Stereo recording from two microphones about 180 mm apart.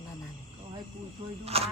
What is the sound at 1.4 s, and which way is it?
Speech, 35° right (ahead or behind).